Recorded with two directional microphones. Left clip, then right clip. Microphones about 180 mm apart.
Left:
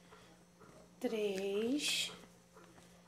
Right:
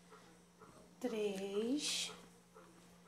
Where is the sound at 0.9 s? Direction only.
20° left (ahead or behind).